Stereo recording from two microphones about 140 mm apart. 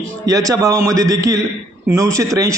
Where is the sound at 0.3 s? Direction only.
25° right (ahead or behind).